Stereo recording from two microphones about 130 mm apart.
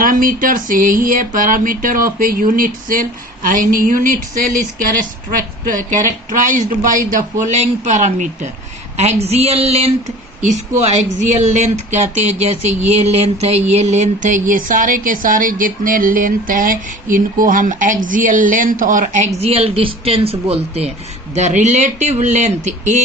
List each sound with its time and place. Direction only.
0.0 s a sound: 90° right
5.9 s speech: 80° right; by 8.3 s 65° right (ahead or behind)
9.2 s speech: 55° right (ahead or behind)
10.4 s a woman's voice: 70° right (ahead or behind)
11.3 s a sound: 60° right (ahead or behind)
21.3 s speech: 65° right (ahead or behind)